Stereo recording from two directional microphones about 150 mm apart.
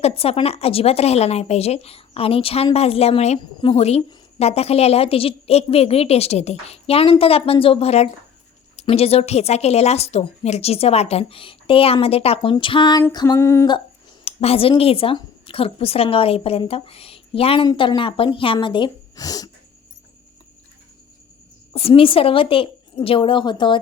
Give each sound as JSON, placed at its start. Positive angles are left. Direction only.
{"t": 0.2, "sound": "a woman's voice", "side_deg": 40}
{"t": 14.3, "sound": "a woman's voice", "side_deg": 40}
{"t": 21.7, "sound": "a woman's voice", "side_deg": 40}